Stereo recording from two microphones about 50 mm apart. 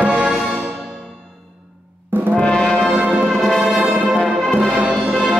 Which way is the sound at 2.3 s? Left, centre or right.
Centre.